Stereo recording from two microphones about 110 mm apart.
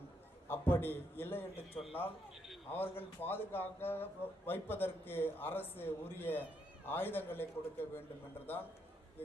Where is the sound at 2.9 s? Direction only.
20° left (ahead or behind).